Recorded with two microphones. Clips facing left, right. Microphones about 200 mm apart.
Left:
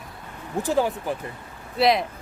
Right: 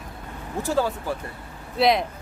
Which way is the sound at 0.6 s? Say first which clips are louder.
Left 1 dB; 15° left (ahead or behind).